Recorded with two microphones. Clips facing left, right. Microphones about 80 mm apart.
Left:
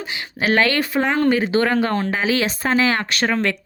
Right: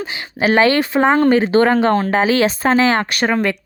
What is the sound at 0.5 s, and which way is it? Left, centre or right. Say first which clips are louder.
Speech: right 4 dB; right.